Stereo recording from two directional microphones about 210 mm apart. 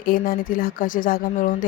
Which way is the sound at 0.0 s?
40° left (ahead or behind).